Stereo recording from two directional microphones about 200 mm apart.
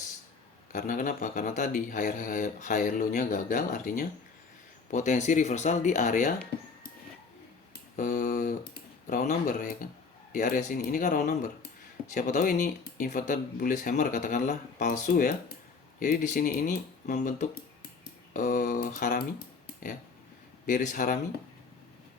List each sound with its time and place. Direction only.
0.7 s speech: 40° left (ahead or behind)
7.7 s a sound: 40° left (ahead or behind)
10.3 s speech: 40° left (ahead or behind)